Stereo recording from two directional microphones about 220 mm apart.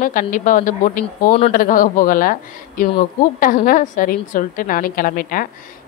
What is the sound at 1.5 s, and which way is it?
Speech, 40° left (ahead or behind).